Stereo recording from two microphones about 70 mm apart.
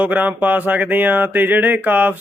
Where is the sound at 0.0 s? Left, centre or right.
Right.